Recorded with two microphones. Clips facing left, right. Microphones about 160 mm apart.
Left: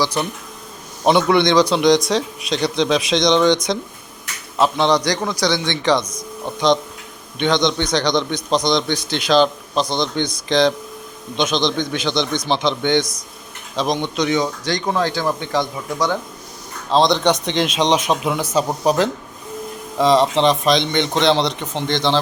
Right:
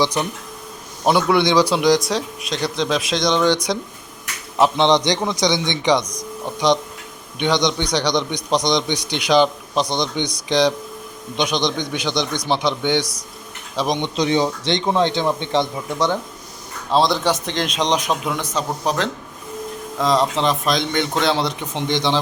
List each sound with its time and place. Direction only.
0.0 s a man's voice: 15° right (ahead or behind)
1.0 s a man's voice: 5° right (ahead or behind)
14.2 s a man's voice: 30° right (ahead or behind)
16.9 s speech: 5° right (ahead or behind)